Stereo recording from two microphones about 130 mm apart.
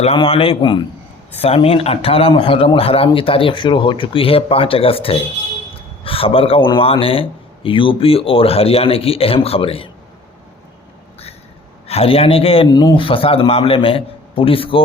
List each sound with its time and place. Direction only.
0.2 s a man's voice: 45° left (ahead or behind)
1.4 s a man's voice: 50° left (ahead or behind)
11.9 s a man's voice: 50° left (ahead or behind)